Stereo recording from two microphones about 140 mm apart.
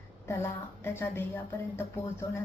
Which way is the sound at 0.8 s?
15° left (ahead or behind).